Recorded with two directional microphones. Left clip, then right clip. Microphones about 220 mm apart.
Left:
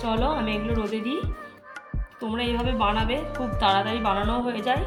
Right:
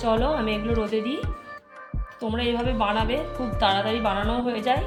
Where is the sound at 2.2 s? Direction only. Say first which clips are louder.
Right 2 dB; 5° right (ahead or behind).